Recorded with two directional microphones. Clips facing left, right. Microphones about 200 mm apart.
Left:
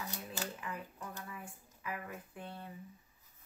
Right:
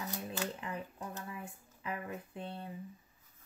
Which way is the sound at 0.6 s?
25° right (ahead or behind).